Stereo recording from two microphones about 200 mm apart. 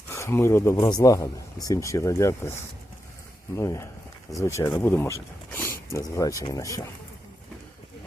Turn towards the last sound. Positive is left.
turn(degrees=15)  # may be behind; listen again after turning